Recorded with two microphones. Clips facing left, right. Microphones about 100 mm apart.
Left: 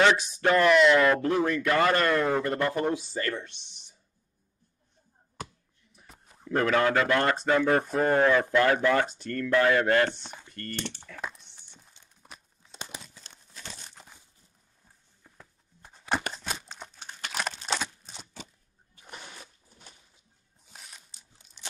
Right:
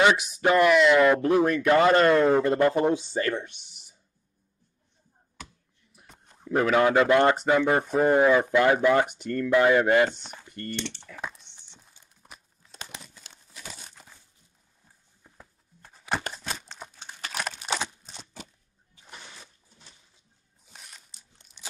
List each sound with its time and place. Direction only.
0.4 s speech: 15° right (ahead or behind)
0.7 s speech: centre (ahead or behind)
1.1 s a man's voice: 15° right (ahead or behind)
5.9 s a sound: centre (ahead or behind)
6.8 s speech: 20° right (ahead or behind)
11.1 s crumpling: centre (ahead or behind)
15.2 s a sound: 5° right (ahead or behind)
16.7 s crumpling: 5° right (ahead or behind)
17.6 s a sound: 10° right (ahead or behind)
20.7 s crunch: centre (ahead or behind)